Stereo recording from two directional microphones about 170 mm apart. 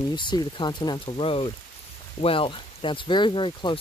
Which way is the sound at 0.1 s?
25° left (ahead or behind).